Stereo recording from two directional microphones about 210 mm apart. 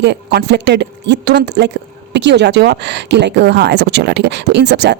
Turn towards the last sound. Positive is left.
turn(degrees=-55)  # may be behind; listen again after turning